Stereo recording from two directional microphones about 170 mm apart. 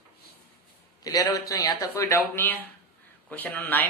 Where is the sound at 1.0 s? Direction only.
20° left (ahead or behind).